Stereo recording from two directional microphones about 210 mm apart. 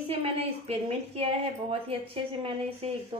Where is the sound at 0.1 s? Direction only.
30° right (ahead or behind).